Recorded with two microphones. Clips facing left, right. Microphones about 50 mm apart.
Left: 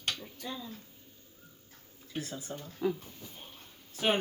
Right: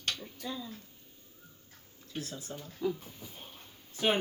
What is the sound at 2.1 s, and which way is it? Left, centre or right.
A man's voice, centre.